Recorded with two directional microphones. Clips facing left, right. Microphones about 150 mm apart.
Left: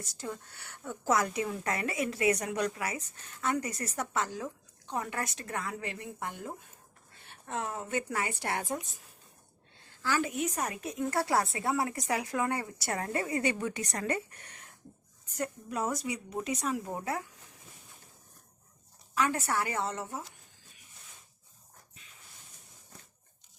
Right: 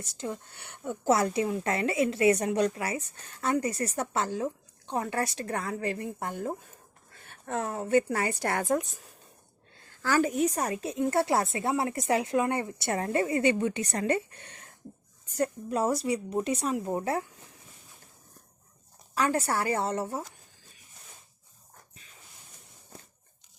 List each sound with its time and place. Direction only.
0.0 s a woman's voice: 20° right (ahead or behind); by 8.6 s 45° right (ahead or behind)
10.0 s a woman's voice: 45° right (ahead or behind)
19.1 s a woman's voice: 35° right (ahead or behind)